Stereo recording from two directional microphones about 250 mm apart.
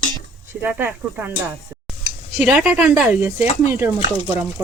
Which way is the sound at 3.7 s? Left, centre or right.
Centre.